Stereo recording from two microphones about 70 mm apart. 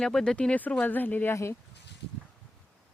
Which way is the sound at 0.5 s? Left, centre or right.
Left.